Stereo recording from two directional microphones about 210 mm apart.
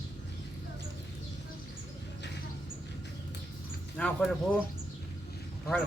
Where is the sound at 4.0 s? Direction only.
5° left (ahead or behind).